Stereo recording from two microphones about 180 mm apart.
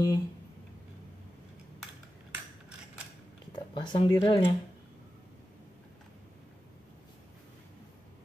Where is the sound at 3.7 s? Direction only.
25° left (ahead or behind).